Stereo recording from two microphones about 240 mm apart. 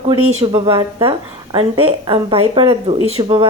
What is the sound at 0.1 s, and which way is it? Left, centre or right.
Speech, right.